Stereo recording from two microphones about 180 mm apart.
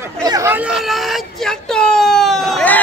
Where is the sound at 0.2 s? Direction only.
20° right (ahead or behind).